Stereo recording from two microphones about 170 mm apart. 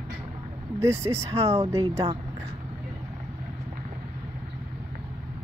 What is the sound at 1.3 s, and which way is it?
Speech, 40° right (ahead or behind).